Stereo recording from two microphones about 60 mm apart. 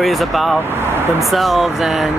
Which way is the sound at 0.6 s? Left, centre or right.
Right.